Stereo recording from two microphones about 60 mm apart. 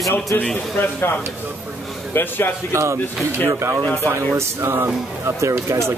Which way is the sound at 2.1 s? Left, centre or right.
Left.